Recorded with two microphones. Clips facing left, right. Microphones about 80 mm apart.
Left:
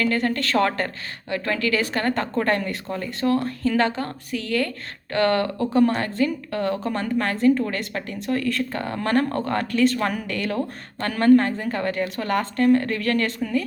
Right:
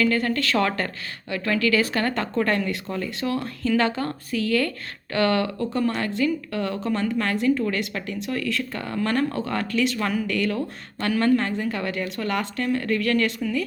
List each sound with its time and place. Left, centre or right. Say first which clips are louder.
0.0 s speech: even; left
2.4 s a woman's voice: right 3 dB; left; by 4.7 s centre
5.1 s a woman's voice: left 1 dB; left
8.4 s a woman's voice: left 3 dB; left